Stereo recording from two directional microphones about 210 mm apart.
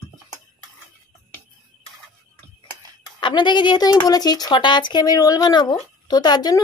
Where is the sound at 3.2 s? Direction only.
20° left (ahead or behind).